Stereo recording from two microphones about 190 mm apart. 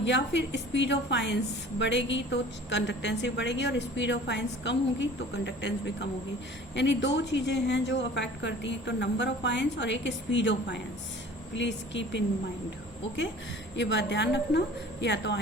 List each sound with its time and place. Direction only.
0.0 s a woman's voice: 70° left (ahead or behind)
13.7 s a woman's voice: 70° left (ahead or behind)